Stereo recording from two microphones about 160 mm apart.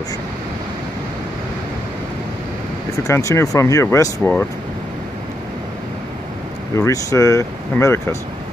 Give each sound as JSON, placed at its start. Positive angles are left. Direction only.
{"t": 3.0, "sound": "speech", "side_deg": 20}
{"t": 6.7, "sound": "speech", "side_deg": 20}